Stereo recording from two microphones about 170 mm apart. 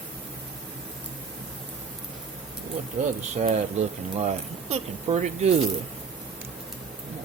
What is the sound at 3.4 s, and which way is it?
Speech, 45° right (ahead or behind).